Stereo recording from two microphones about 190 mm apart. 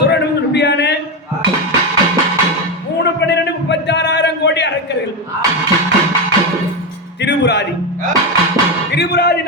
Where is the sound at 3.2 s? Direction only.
65° left (ahead or behind).